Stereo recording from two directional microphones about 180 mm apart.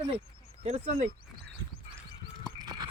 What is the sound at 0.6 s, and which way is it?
Speech, 35° right (ahead or behind).